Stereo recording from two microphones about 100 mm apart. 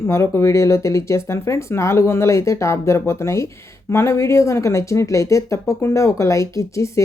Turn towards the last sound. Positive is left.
turn(degrees=30)  # may be behind; listen again after turning